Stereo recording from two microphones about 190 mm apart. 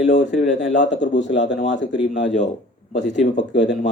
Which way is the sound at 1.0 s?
70° left (ahead or behind).